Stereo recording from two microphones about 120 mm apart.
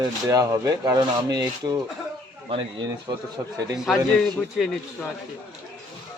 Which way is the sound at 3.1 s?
35° right (ahead or behind).